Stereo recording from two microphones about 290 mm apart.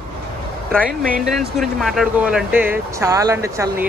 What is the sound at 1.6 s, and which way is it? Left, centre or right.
Speech, centre.